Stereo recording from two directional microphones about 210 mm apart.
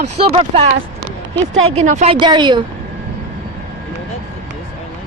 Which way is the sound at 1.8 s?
35° right (ahead or behind).